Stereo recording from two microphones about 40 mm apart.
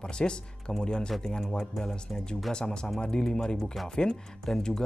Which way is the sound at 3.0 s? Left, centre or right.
Left.